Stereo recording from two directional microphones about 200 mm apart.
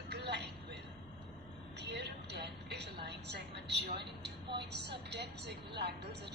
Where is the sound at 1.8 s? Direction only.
60° right (ahead or behind).